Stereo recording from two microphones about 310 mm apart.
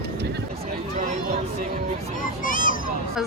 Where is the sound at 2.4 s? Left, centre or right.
Left.